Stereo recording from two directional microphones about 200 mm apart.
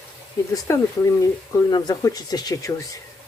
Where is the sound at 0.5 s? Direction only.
15° left (ahead or behind).